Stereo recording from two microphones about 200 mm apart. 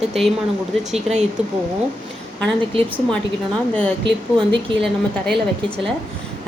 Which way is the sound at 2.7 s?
25° right (ahead or behind).